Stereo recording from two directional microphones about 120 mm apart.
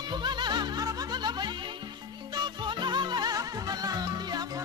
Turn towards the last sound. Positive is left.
turn(degrees=-35)  # may be behind; listen again after turning